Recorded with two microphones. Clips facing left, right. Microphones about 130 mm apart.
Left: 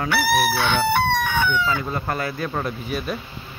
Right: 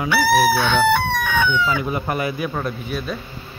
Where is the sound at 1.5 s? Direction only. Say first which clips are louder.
Right 2 dB; 15° right (ahead or behind).